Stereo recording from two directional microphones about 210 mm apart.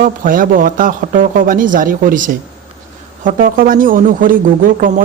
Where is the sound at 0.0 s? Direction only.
40° right (ahead or behind).